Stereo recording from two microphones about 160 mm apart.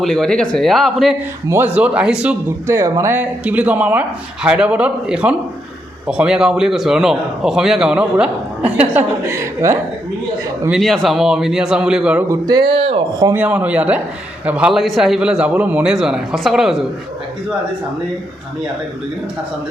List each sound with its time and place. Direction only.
0.0 s a man's voice: 5° left (ahead or behind)
1.5 s speech: 15° right (ahead or behind)
2.7 s a man's voice: 20° right (ahead or behind)
10.7 s a man's voice: centre (ahead or behind)
12.3 s speech: 25° right (ahead or behind)
13.3 s a man's voice: 10° right (ahead or behind)